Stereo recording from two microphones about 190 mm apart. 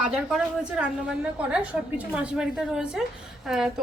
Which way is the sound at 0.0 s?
5° right (ahead or behind).